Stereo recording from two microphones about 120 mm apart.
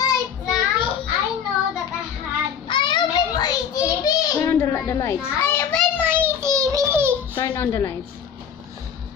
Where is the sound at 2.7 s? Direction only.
40° left (ahead or behind); by 5.2 s 25° left (ahead or behind).